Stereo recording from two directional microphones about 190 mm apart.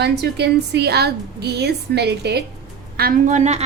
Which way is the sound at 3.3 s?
35° right (ahead or behind).